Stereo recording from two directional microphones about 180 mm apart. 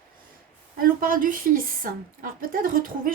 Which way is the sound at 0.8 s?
50° right (ahead or behind).